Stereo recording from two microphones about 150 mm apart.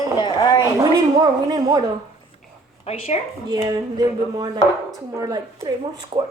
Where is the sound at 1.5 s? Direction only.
25° right (ahead or behind).